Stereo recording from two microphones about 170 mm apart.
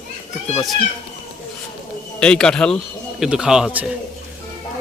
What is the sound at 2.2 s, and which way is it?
A man's voice, 5° left (ahead or behind).